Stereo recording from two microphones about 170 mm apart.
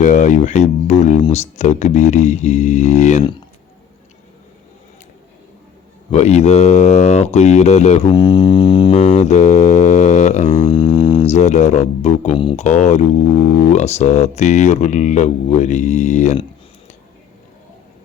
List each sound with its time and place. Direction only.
0.0 s speech: 50° left (ahead or behind)
6.1 s speech: 40° left (ahead or behind)
8.1 s music: 25° left (ahead or behind)
8.9 s mantra: 45° left (ahead or behind)
10.7 s didgeridoo: 25° left (ahead or behind)
11.3 s speech: 45° left (ahead or behind)